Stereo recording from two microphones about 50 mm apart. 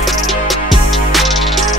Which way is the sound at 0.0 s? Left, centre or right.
Centre.